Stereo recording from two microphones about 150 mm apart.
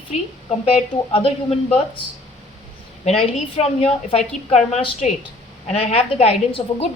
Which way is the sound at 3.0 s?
45° left (ahead or behind).